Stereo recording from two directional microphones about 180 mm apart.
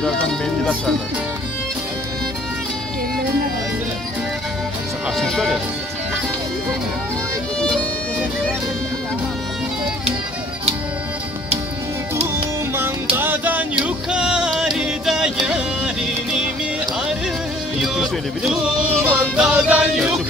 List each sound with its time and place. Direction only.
0.0 s music: 5° left (ahead or behind)
5.1 s music: centre (ahead or behind)
13.1 s music: 10° right (ahead or behind)
17.7 s music: centre (ahead or behind)